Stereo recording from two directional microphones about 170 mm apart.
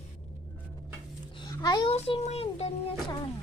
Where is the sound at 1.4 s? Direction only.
20° left (ahead or behind).